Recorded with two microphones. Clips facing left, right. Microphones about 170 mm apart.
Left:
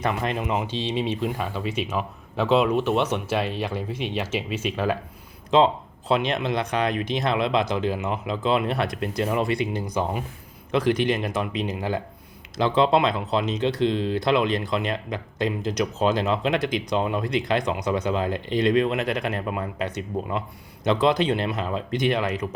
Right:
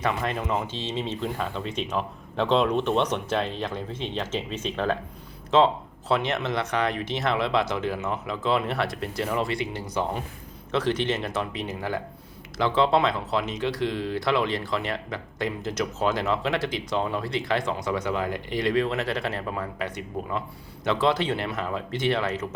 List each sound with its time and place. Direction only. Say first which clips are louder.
0.1 s speech: left 2 dB; 20° left (ahead or behind)